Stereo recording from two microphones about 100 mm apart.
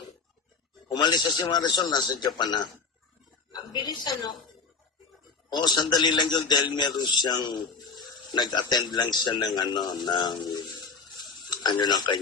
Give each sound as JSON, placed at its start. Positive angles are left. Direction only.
{"t": 0.9, "sound": "a man's voice", "side_deg": 45}
{"t": 3.7, "sound": "a man's voice", "side_deg": 50}
{"t": 5.5, "sound": "a man's voice", "side_deg": 45}
{"t": 10.4, "sound": "a sound", "side_deg": 50}